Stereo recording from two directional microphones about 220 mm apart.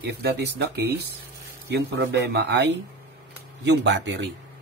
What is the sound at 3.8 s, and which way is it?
Speech, 55° right (ahead or behind).